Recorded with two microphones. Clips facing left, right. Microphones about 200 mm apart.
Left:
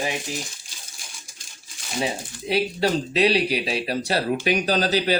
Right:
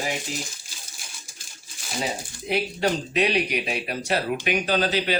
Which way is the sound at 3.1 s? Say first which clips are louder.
Left 3 dB; 35° left (ahead or behind).